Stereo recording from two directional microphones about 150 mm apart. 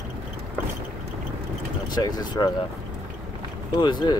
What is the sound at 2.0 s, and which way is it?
Speech, 25° left (ahead or behind).